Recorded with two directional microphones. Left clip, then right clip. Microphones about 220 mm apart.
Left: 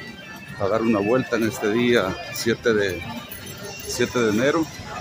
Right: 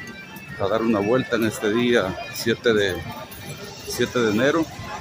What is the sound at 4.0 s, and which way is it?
Speech, 5° left (ahead or behind).